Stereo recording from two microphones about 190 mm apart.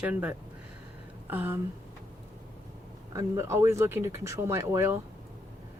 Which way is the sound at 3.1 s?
15° right (ahead or behind).